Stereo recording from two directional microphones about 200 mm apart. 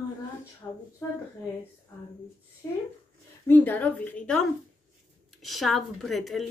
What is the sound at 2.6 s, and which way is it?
A woman's voice, 10° left (ahead or behind).